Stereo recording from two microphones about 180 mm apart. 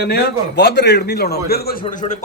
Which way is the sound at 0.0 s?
65° left (ahead or behind).